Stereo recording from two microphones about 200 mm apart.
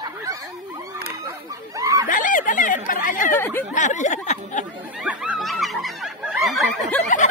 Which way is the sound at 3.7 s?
40° left (ahead or behind).